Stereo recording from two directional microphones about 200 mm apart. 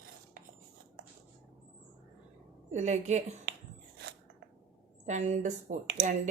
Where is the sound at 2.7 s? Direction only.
35° right (ahead or behind).